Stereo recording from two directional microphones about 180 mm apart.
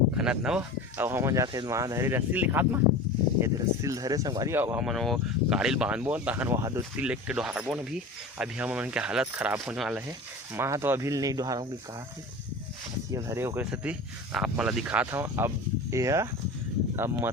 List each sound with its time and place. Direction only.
0.2 s speech: 5° right (ahead or behind)
7.0 s speech: 5° right (ahead or behind)
10.5 s speech: 15° right (ahead or behind)
13.1 s speech: 15° right (ahead or behind)